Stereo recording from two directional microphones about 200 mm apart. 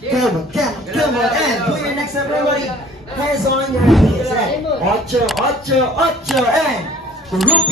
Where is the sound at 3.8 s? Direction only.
Centre (ahead or behind).